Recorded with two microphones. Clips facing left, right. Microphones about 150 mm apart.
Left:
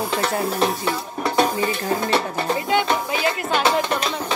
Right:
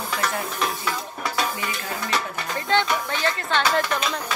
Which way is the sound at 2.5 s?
10° left (ahead or behind).